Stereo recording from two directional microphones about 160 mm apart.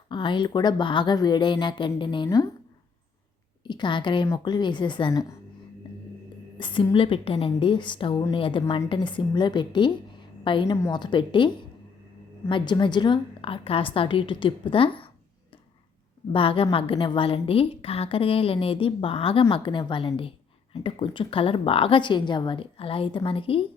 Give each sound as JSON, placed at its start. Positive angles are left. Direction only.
{"t": 0.1, "sound": "a woman's voice", "side_deg": 30}
{"t": 3.7, "sound": "a woman's voice", "side_deg": 30}
{"t": 6.6, "sound": "a woman's voice", "side_deg": 30}
{"t": 10.7, "sound": "a woman's voice", "side_deg": 20}
{"t": 16.3, "sound": "a woman's voice", "side_deg": 35}